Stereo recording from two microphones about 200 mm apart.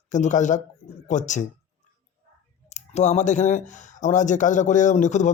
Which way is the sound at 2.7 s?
35° left (ahead or behind).